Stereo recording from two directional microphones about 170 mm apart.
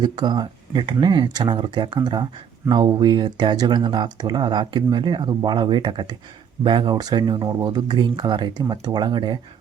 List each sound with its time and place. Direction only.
0.0 s speech: 25° right (ahead or behind)